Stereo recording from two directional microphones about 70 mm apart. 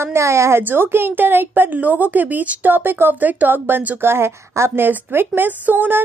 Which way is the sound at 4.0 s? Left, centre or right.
Right.